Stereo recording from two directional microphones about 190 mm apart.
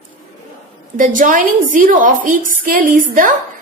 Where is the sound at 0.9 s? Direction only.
45° right (ahead or behind).